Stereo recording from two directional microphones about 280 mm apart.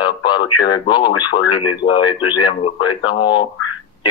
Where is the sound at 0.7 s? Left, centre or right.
Centre.